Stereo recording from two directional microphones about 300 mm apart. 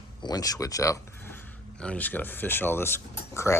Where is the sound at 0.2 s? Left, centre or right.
Centre.